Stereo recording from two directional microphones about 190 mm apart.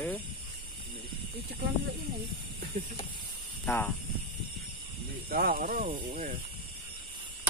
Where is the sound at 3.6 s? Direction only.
10° left (ahead or behind).